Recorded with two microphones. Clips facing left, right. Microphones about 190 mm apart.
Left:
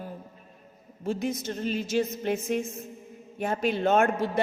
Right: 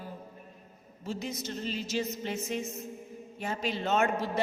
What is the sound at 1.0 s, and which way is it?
A man's voice, 55° left (ahead or behind).